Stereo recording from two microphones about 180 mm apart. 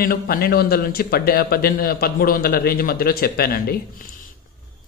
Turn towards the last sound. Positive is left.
turn(degrees=55)  # may be behind; listen again after turning